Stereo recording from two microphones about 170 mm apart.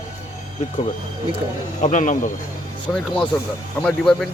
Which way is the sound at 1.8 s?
45° left (ahead or behind).